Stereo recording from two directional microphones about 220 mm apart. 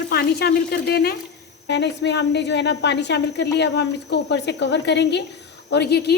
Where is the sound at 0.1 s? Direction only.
45° left (ahead or behind).